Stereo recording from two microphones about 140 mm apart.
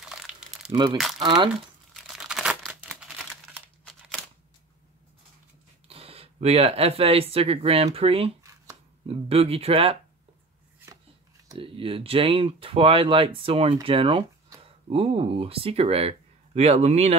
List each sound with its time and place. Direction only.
0.0 s crumpling: 5° right (ahead or behind)
0.7 s speech: 30° right (ahead or behind)
2.0 s crumpling: 5° right (ahead or behind)
5.9 s speech: 45° right (ahead or behind)
11.5 s speech: 40° right (ahead or behind)